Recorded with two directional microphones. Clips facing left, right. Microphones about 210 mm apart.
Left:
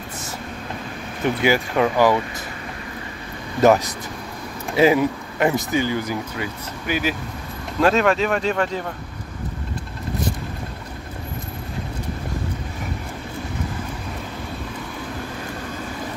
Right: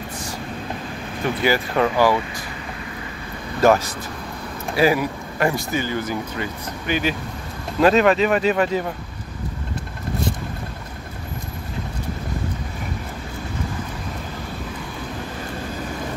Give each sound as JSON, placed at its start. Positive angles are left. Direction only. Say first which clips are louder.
{"t": 1.4, "sound": "speech", "louder": "even", "side_deg": 15}
{"t": 3.6, "sound": "speech", "louder": "left 1 dB", "side_deg": 20}